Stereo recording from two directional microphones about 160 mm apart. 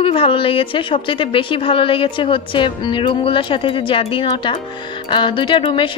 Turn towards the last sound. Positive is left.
turn(degrees=30)  # may be behind; listen again after turning